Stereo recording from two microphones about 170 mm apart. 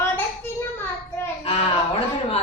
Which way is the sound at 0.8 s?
15° left (ahead or behind).